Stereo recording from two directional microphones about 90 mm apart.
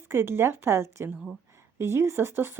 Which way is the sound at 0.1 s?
25° right (ahead or behind).